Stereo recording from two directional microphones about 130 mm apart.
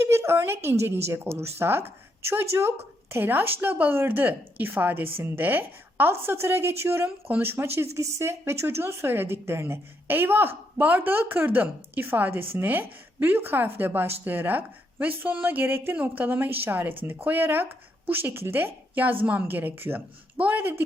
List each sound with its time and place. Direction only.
0.0 s a woman's voice: 20° right (ahead or behind)